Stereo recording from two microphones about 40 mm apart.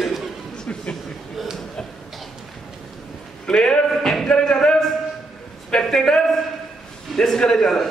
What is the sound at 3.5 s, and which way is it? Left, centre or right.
A man's voice, left.